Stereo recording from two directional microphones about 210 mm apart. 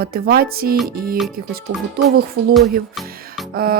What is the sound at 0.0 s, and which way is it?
Speech, 45° right (ahead or behind).